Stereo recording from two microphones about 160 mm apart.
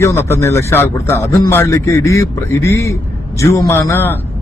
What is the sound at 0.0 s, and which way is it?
A man's voice, 15° left (ahead or behind).